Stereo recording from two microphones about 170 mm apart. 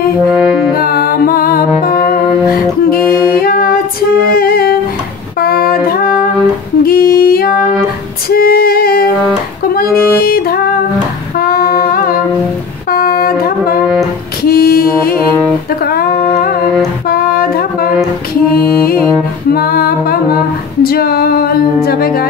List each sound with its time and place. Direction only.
0.7 s music: 60° left (ahead or behind)
6.8 s a sound: 65° left (ahead or behind)
8.3 s female singing: 60° left (ahead or behind)
10.2 s music: 60° left (ahead or behind)
11.3 s a sound: 60° left (ahead or behind)
12.9 s music: 60° left (ahead or behind)
15.8 s a sound: 65° left (ahead or behind)
17.1 s music: 60° left (ahead or behind)
20.8 s female singing: 65° left (ahead or behind)
21.8 s music: 60° left (ahead or behind)